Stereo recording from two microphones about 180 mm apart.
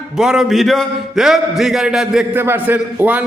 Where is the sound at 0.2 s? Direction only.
5° right (ahead or behind).